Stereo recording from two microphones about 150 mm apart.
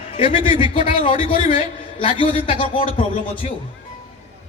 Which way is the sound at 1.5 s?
35° left (ahead or behind).